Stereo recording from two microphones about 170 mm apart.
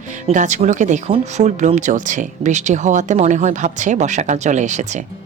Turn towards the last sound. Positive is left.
turn(degrees=-45)  # may be behind; listen again after turning